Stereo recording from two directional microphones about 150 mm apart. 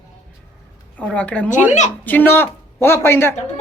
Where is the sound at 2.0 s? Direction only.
10° left (ahead or behind).